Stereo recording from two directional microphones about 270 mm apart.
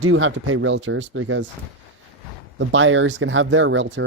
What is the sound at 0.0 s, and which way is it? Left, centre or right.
Speech, right.